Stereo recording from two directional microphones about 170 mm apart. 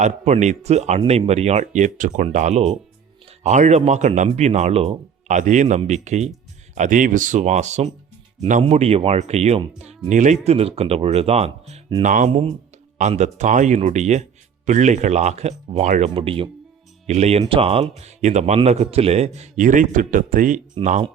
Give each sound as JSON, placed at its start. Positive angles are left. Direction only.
{"t": 0.0, "sound": "speech", "side_deg": -45}
{"t": 12.0, "sound": "speech", "side_deg": -45}